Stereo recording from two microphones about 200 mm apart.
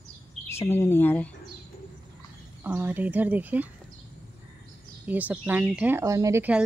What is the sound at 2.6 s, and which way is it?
Speech, 10° right (ahead or behind).